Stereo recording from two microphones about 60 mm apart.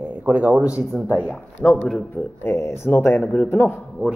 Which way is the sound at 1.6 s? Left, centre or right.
Centre.